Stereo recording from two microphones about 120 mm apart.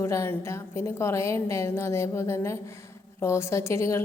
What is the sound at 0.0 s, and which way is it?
A woman's voice, 20° left (ahead or behind).